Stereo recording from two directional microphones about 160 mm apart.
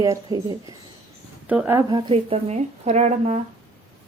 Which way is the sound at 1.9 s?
35° right (ahead or behind).